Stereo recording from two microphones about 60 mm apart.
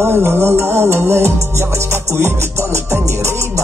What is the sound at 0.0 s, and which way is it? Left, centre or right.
Music, right.